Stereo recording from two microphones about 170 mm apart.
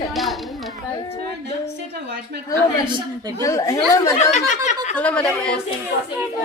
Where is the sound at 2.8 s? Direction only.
25° right (ahead or behind).